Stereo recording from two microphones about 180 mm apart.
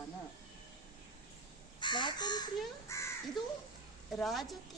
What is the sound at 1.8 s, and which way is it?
Speech, 25° left (ahead or behind).